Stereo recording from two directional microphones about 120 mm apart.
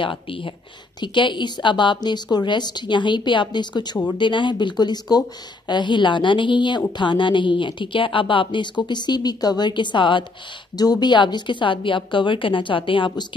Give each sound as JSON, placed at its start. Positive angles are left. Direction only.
{"t": 0.0, "sound": "a woman's voice", "side_deg": 45}